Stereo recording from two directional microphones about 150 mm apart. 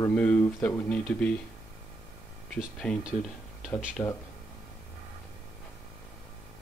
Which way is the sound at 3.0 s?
5° right (ahead or behind).